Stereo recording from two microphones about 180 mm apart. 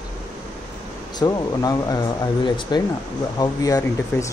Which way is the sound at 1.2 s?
20° left (ahead or behind).